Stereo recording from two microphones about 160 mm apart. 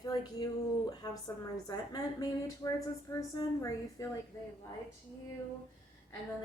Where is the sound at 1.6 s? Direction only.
25° left (ahead or behind).